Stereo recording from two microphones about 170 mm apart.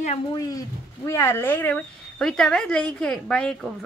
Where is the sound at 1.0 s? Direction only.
15° left (ahead or behind).